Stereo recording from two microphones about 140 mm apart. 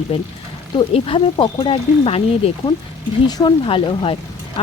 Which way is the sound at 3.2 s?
35° left (ahead or behind).